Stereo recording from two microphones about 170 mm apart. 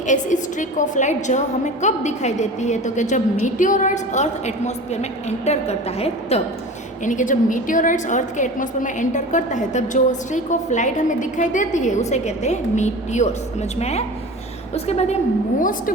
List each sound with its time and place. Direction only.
0.1 s a woman's voice: 45° left (ahead or behind)